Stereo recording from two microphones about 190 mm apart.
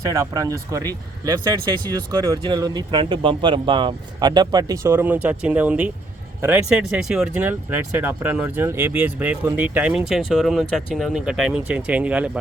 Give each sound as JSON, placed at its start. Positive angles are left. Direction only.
{"t": 0.1, "sound": "speech", "side_deg": -15}
{"t": 1.9, "sound": "speech", "side_deg": -20}